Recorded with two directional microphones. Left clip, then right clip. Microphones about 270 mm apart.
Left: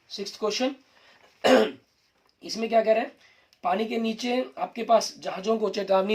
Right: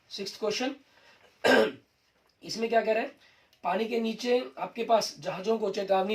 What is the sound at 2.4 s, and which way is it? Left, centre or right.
Speech, left.